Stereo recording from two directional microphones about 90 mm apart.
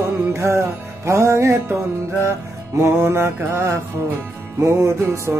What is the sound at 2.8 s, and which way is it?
Mantra, 30° right (ahead or behind).